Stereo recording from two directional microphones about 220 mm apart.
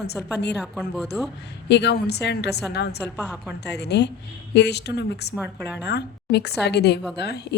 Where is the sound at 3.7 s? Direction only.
50° left (ahead or behind).